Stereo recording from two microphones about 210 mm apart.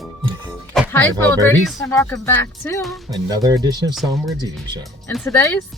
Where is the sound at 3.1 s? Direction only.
15° right (ahead or behind).